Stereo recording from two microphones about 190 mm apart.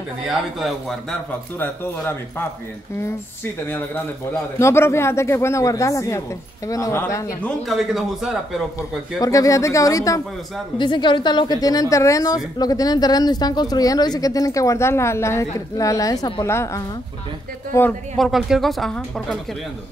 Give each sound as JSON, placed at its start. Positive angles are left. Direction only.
{"t": 0.6, "sound": "speech", "side_deg": 0}
{"t": 3.6, "sound": "a man's voice", "side_deg": 10}
{"t": 7.4, "sound": "speech", "side_deg": 0}
{"t": 9.2, "sound": "a man's voice", "side_deg": 15}